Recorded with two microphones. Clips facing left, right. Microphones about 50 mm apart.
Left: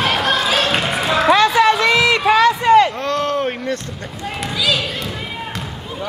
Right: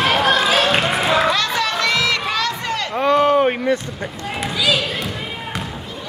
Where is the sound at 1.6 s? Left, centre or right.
Centre.